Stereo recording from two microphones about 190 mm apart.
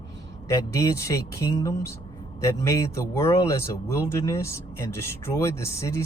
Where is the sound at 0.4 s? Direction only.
15° left (ahead or behind).